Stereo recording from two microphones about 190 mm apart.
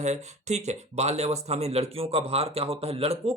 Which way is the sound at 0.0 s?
35° right (ahead or behind).